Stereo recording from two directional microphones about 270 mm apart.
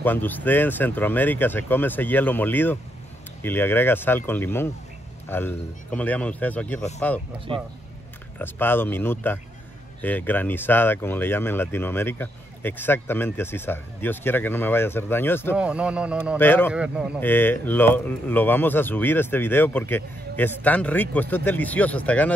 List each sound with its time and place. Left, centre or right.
0.0 s speech: centre
7.5 s speech: centre
8.4 s speech: centre
15.5 s speech: centre
16.3 s speech: centre
16.7 s speech: centre
17.2 s speech: centre